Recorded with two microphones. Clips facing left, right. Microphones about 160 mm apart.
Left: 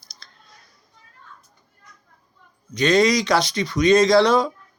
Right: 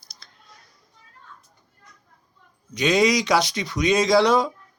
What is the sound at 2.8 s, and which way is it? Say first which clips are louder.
Speech: left 2 dB; 10° right (ahead or behind).